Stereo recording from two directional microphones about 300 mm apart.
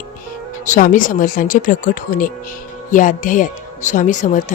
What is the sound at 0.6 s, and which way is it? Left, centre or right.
Speech, left.